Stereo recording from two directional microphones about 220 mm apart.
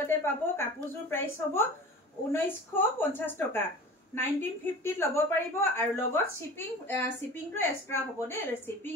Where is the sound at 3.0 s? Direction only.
10° left (ahead or behind).